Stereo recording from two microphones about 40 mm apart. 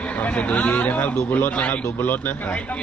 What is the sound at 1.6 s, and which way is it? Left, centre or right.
Speech, left.